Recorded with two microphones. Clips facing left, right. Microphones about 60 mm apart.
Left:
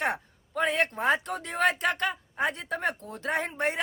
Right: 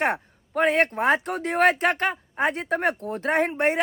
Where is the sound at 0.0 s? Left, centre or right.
Right.